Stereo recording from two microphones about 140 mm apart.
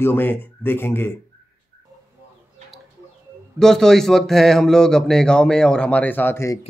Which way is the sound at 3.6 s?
5° left (ahead or behind).